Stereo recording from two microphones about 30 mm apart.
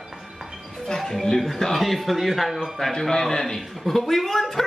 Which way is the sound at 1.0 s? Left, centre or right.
Centre.